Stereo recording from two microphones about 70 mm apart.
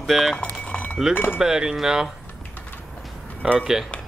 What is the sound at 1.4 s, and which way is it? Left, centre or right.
Speech, centre.